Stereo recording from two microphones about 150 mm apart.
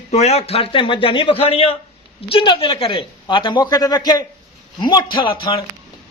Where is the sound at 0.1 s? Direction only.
45° left (ahead or behind).